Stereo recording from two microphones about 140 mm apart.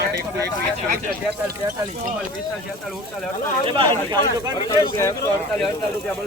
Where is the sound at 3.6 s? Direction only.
35° right (ahead or behind).